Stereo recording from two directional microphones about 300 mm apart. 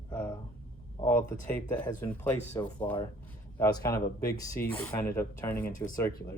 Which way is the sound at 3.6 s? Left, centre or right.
Centre.